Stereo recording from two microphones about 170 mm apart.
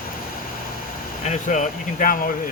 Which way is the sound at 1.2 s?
45° left (ahead or behind).